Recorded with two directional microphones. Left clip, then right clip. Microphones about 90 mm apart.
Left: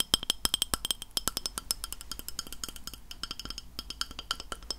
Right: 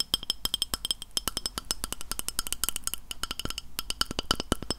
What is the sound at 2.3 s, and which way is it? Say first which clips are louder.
Cowbell: right 8 dB; 25° right (ahead or behind).